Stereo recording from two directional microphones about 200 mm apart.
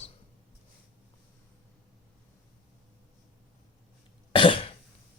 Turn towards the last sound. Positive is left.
turn(degrees=25)  # may be behind; listen again after turning